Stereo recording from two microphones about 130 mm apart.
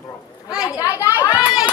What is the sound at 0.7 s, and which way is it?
Speech, 25° left (ahead or behind).